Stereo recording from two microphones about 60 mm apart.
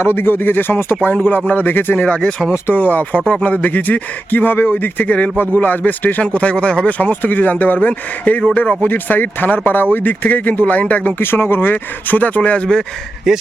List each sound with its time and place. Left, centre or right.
0.0 s speech: left
2.0 s speech: centre
2.7 s speech: left
7.0 s speech: left
8.8 s speech: left
11.2 s speech: left
12.4 s speech: centre
13.3 s speech: centre